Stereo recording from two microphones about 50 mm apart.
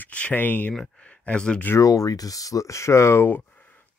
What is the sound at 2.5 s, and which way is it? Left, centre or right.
Speech, left.